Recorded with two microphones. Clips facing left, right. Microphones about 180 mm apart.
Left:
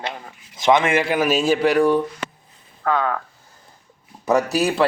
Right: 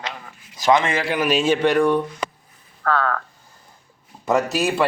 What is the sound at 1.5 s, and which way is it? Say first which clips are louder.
Speech: left 1 dB; 5° left (ahead or behind).